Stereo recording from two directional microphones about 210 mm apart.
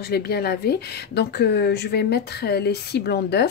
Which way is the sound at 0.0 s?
50° left (ahead or behind).